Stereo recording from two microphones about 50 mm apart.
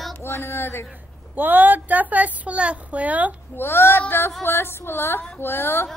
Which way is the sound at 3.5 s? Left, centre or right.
Left.